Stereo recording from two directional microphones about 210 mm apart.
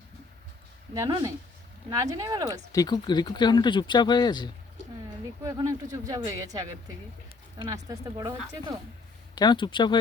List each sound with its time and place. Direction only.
0.9 s speech: 15° right (ahead or behind)
2.5 s speech: 15° left (ahead or behind)
5.4 s speech: 15° right (ahead or behind)
9.3 s speech: 20° left (ahead or behind)